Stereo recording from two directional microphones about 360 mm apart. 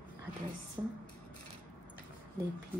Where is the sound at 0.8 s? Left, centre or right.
Centre.